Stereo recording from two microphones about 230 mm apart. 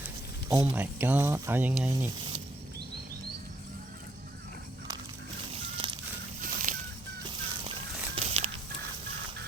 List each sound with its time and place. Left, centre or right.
0.6 s speech: centre
5.7 s a sound: centre
6.4 s fowl: right
7.3 s fowl: right